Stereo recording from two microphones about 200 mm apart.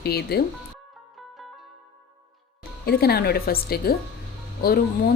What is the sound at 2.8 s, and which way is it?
A woman's voice, 50° left (ahead or behind).